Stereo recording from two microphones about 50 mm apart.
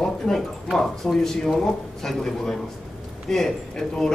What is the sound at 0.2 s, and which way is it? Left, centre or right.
A man's voice, centre.